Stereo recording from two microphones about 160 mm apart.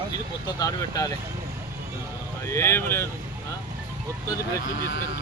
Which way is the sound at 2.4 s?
15° left (ahead or behind).